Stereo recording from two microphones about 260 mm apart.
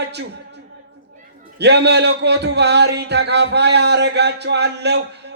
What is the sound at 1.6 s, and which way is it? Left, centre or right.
A man's voice, right.